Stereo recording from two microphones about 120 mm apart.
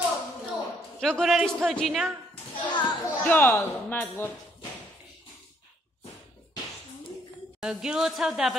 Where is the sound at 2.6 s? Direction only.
40° left (ahead or behind).